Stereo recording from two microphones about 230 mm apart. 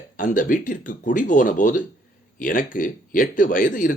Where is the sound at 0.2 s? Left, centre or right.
Left.